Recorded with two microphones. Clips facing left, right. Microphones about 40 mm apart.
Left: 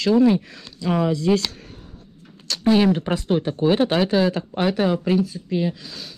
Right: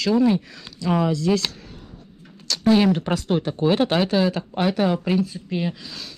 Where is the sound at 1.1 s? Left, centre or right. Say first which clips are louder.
Left 2 dB; left.